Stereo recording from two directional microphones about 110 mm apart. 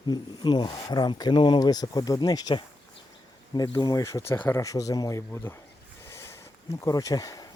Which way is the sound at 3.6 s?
40° left (ahead or behind).